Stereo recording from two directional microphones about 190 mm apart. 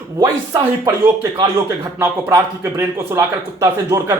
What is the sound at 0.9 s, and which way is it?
A man's voice, 20° right (ahead or behind).